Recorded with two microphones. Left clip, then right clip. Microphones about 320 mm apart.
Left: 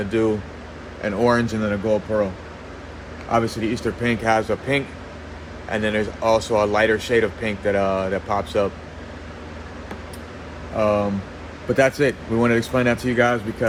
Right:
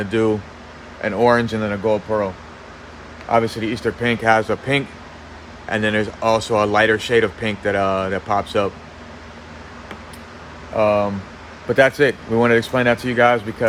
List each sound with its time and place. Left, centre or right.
0.1 s speech: right
3.3 s speech: right
10.8 s speech: right